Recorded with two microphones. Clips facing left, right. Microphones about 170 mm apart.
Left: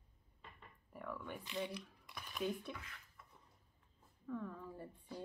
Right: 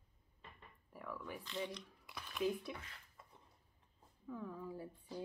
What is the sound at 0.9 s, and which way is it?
Speech, centre (ahead or behind).